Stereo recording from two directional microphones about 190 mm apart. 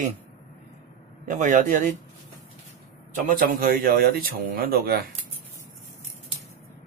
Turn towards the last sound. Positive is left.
turn(degrees=-50)  # may be behind; listen again after turning